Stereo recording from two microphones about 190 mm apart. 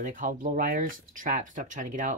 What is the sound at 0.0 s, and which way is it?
Speech, 45° right (ahead or behind).